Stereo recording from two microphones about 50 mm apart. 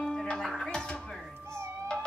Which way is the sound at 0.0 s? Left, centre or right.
Centre.